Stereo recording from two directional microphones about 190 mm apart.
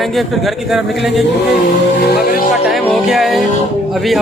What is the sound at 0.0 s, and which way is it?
A man's voice, centre (ahead or behind).